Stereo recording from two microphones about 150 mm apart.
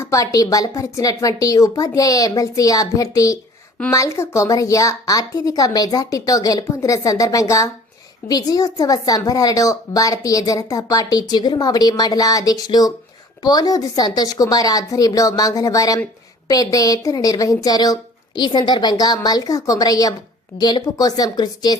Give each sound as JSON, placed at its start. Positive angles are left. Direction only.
{"t": 0.0, "sound": "a woman's voice", "side_deg": 20}